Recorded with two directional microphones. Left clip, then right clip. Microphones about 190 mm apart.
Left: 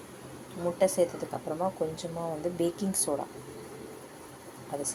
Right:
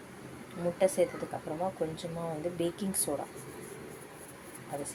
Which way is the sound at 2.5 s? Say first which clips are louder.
Left 3 dB; 10° left (ahead or behind).